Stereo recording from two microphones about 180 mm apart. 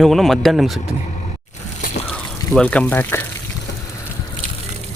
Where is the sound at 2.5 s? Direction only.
5° left (ahead or behind).